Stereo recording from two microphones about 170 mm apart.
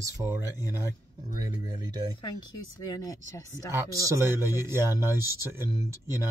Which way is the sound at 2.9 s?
20° left (ahead or behind).